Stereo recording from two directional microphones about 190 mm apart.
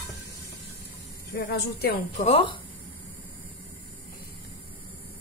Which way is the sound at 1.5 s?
55° left (ahead or behind).